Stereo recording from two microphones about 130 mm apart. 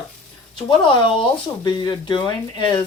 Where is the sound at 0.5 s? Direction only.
40° left (ahead or behind).